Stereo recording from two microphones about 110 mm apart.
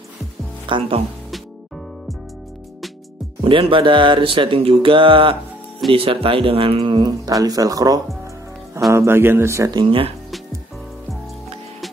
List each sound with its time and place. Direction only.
0.7 s speech: 55° right (ahead or behind)
3.4 s speech: 50° right (ahead or behind)
6.9 s speech: 35° right (ahead or behind)
8.9 s speech: 25° right (ahead or behind)
9.8 s speech: 55° right (ahead or behind)